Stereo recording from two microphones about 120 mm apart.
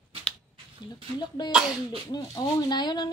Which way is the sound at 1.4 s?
35° left (ahead or behind).